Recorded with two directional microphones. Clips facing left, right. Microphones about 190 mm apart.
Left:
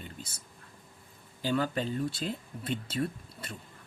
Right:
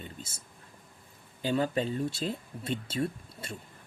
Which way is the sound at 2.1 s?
25° right (ahead or behind).